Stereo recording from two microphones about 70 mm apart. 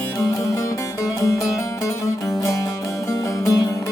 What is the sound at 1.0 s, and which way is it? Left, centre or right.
Music, left.